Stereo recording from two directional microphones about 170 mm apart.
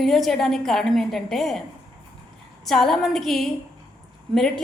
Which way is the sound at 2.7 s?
Centre (ahead or behind).